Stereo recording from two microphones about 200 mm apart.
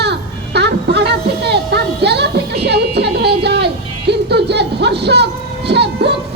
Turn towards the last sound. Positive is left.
turn(degrees=-60)  # may be behind; listen again after turning